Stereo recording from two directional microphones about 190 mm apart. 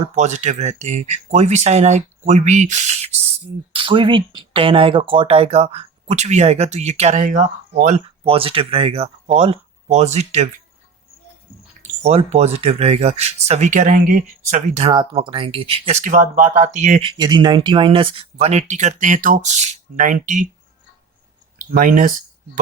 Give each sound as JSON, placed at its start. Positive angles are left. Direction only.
{"t": 0.2, "sound": "speech", "side_deg": -40}
{"t": 11.8, "sound": "speech", "side_deg": -35}
{"t": 17.1, "sound": "speech", "side_deg": -20}
{"t": 21.6, "sound": "speech", "side_deg": -50}